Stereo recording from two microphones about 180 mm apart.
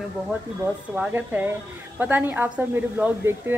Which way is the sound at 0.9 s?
10° right (ahead or behind).